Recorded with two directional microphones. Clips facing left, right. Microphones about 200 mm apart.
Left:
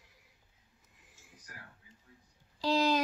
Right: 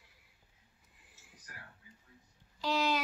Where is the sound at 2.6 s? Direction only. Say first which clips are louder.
Left 4 dB; 35° left (ahead or behind).